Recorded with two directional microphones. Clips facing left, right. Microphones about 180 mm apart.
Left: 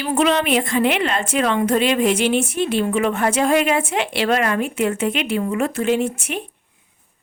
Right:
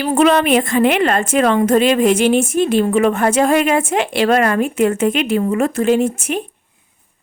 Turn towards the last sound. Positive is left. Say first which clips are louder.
# right 5 dB
turn(degrees=-45)  # may be behind; listen again after turning